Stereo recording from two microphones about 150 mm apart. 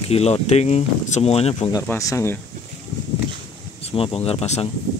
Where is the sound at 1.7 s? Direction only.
20° left (ahead or behind).